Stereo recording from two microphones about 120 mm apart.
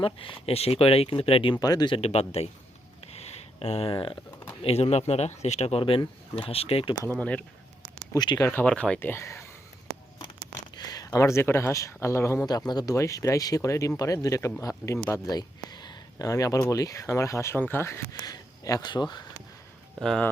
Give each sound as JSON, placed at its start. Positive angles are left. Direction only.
{"t": 0.0, "sound": "speech", "side_deg": 50}
{"t": 1.5, "sound": "speech", "side_deg": 35}
{"t": 2.0, "sound": "speech", "side_deg": 55}
{"t": 3.1, "sound": "a sound", "side_deg": 60}
{"t": 4.6, "sound": "speech", "side_deg": 60}
{"t": 7.1, "sound": "speech", "side_deg": 10}
{"t": 8.1, "sound": "speech", "side_deg": 35}
{"t": 8.4, "sound": "speech", "side_deg": 10}
{"t": 9.0, "sound": "speech", "side_deg": 20}
{"t": 10.8, "sound": "speech", "side_deg": 35}
{"t": 12.5, "sound": "a man's voice", "side_deg": 35}
{"t": 20.0, "sound": "speech", "side_deg": 5}